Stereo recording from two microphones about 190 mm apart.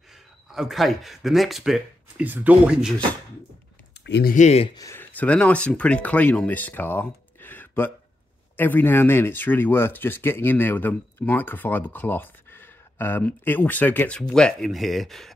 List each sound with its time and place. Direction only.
0.5 s speech: centre (ahead or behind)
4.0 s a sound: 65° left (ahead or behind)
4.3 s speech: 35° left (ahead or behind)
4.7 s speech: 15° left (ahead or behind)